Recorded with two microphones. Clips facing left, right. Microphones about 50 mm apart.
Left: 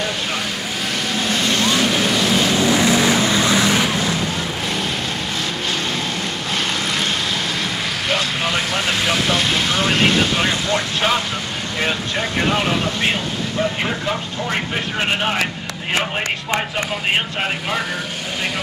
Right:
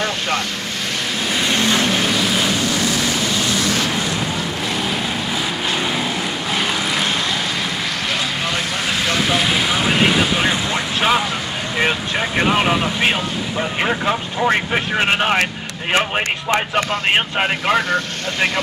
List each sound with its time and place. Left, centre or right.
1.3 s vehicle: centre
1.6 s vehicle: right
1.9 s vehicle: centre
2.5 s vehicle: left
9.0 s vehicle: centre; by 12.6 s right